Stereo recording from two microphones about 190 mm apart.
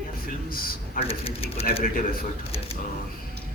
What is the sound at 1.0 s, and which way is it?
Speech, 30° left (ahead or behind).